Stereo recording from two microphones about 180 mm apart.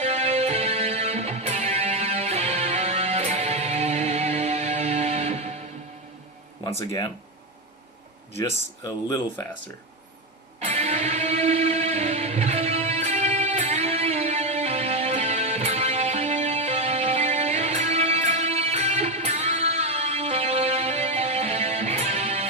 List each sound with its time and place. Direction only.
0.0 s music: 40° right (ahead or behind)
6.7 s speech: 15° left (ahead or behind)
8.4 s speech: 15° left (ahead or behind)
10.7 s music: 40° right (ahead or behind)